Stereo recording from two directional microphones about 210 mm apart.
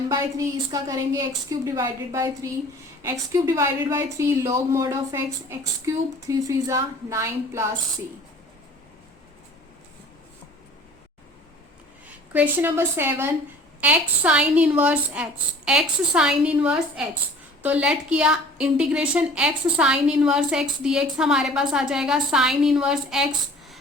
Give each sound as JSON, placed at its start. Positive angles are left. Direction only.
{"t": 0.1, "sound": "a woman's voice", "side_deg": -15}
{"t": 12.3, "sound": "a woman's voice", "side_deg": -10}